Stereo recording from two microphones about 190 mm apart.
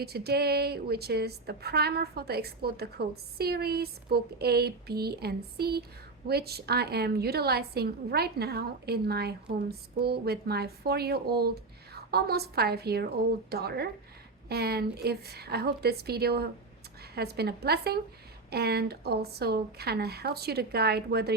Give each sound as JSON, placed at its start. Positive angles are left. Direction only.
{"t": 0.0, "sound": "a woman's voice", "side_deg": -55}